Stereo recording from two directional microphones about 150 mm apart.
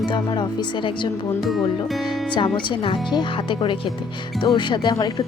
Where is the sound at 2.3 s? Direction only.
35° left (ahead or behind).